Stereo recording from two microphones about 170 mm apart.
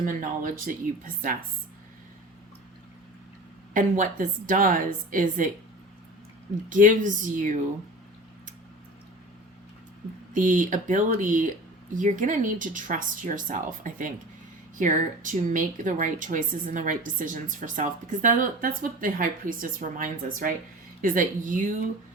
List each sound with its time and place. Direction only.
0.0 s a woman's voice: 50° right (ahead or behind)
3.8 s a woman's voice: 50° right (ahead or behind)
6.7 s a woman's voice: 50° right (ahead or behind)
10.3 s a woman's voice: 50° right (ahead or behind)